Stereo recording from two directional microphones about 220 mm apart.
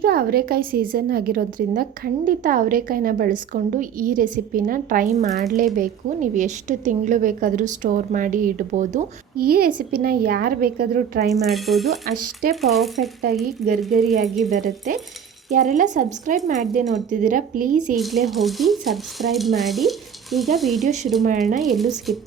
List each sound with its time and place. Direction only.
0.0 s a woman's voice: 45° right (ahead or behind)
11.3 s speech: centre (ahead or behind)
14.5 s a woman's voice: 40° right (ahead or behind)
17.9 s speech: centre (ahead or behind)
20.8 s a woman's voice: 30° right (ahead or behind)
21.6 s speech: centre (ahead or behind)